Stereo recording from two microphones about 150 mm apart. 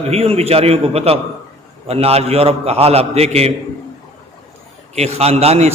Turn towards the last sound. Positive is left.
turn(degrees=-45)  # may be behind; listen again after turning